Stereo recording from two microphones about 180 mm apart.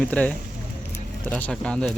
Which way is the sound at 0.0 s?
10° left (ahead or behind).